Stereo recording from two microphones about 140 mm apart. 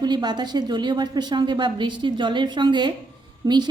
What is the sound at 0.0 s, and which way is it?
A woman's voice, 30° right (ahead or behind).